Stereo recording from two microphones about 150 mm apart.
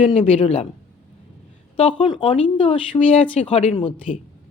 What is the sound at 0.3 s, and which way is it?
Speech, 40° left (ahead or behind).